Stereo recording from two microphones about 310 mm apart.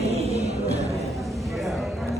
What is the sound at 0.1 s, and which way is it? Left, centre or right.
Music, centre.